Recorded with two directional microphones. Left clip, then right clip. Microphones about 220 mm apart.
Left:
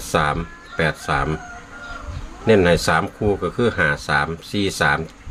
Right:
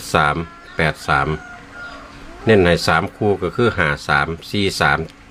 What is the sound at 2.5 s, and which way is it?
Speech, 15° right (ahead or behind).